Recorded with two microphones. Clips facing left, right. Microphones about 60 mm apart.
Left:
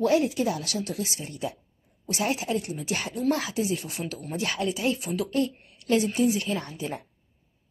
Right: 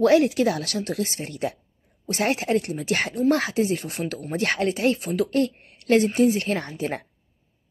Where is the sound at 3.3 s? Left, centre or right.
Right.